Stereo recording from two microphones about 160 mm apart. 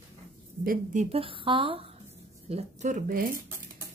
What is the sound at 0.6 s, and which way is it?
Speech, 65° right (ahead or behind).